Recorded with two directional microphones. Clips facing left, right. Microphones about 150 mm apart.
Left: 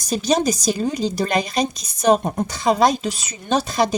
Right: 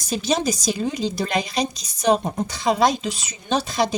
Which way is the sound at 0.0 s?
40° left (ahead or behind).